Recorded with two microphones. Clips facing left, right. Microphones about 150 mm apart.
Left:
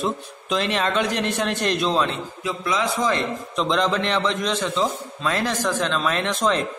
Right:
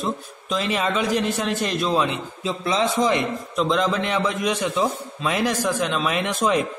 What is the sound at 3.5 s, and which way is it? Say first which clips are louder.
A man's voice: even; 5° right (ahead or behind).